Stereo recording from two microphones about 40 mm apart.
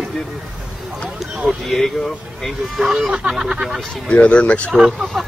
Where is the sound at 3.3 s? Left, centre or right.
Centre.